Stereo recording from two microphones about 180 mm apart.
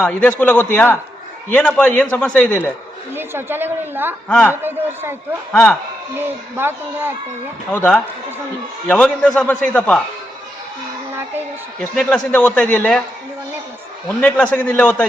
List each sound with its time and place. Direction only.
0.0 s a man's voice: 5° left (ahead or behind)
3.2 s a woman's voice: 10° right (ahead or behind)
4.3 s a man's voice: 5° left (ahead or behind)
4.6 s a woman's voice: 10° right (ahead or behind)
6.1 s a woman's voice: 10° right (ahead or behind)
7.7 s a man's voice: 10° left (ahead or behind)
11.8 s a man's voice: 5° left (ahead or behind)
14.1 s a man's voice: 5° left (ahead or behind)